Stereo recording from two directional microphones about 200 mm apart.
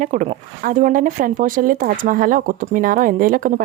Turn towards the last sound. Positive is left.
turn(degrees=-45)  # may be behind; listen again after turning